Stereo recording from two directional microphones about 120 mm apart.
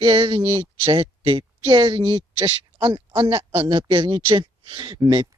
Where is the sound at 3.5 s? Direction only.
50° right (ahead or behind).